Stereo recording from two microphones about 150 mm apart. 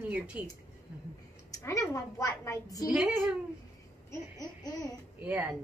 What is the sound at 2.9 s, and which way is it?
Speech, 10° right (ahead or behind).